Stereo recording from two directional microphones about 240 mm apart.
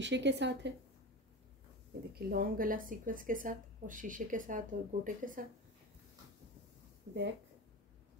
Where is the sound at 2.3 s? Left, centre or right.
Right.